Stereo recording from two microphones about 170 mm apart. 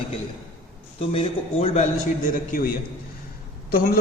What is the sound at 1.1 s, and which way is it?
Speech, 35° left (ahead or behind).